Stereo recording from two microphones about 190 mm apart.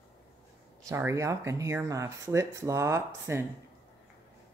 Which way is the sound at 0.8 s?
15° right (ahead or behind).